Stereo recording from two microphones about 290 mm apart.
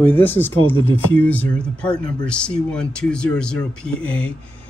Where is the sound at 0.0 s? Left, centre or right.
Centre.